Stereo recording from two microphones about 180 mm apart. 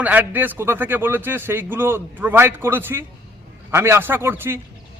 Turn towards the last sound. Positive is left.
turn(degrees=-10)  # may be behind; listen again after turning